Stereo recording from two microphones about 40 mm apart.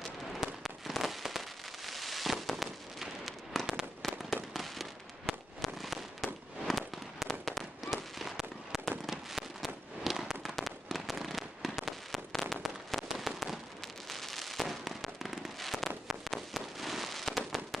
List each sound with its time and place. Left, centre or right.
0.3 s fireworks: centre